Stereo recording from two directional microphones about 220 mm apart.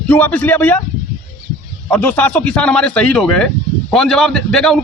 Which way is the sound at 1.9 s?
5° left (ahead or behind).